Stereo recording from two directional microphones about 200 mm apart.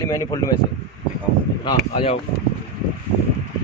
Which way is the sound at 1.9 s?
30° left (ahead or behind).